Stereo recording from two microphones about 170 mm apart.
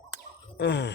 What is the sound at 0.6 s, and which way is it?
Speech, 90° left.